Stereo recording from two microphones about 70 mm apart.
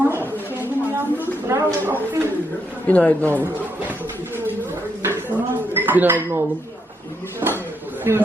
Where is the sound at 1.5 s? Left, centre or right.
Right.